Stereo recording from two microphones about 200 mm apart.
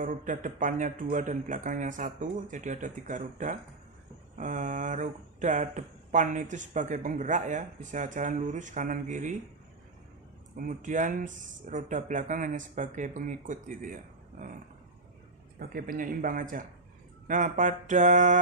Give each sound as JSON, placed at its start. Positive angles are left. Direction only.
{"t": 0.0, "sound": "speech", "side_deg": -40}
{"t": 10.5, "sound": "speech", "side_deg": -40}
{"t": 15.6, "sound": "speech", "side_deg": -45}